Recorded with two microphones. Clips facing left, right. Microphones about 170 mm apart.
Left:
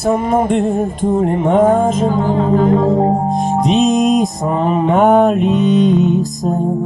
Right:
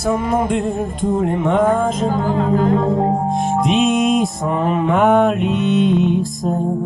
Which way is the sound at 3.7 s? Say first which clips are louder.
Left 4 dB; 40° left (ahead or behind).